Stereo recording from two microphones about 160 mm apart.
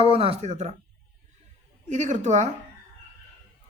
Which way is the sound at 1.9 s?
50° right (ahead or behind).